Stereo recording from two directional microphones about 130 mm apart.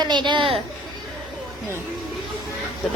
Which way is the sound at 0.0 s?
35° right (ahead or behind).